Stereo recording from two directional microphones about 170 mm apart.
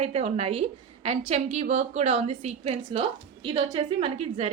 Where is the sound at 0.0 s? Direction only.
35° right (ahead or behind).